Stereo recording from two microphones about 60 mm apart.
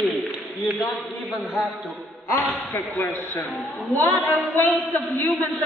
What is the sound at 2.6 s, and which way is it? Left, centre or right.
A man's voice, left.